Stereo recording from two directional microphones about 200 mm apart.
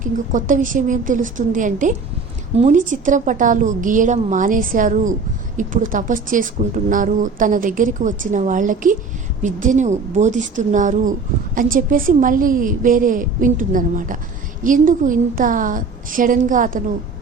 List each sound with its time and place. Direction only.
0.0 s a woman's voice: 40° right (ahead or behind)